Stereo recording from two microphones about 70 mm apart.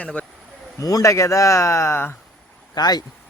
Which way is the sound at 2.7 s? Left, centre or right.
Left.